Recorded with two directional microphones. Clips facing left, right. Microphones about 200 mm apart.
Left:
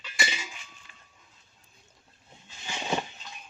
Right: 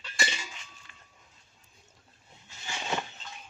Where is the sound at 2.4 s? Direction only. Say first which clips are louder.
Left 3 dB; 20° left (ahead or behind).